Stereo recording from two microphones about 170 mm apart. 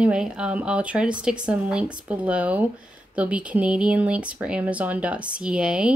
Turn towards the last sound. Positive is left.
turn(degrees=-5)  # may be behind; listen again after turning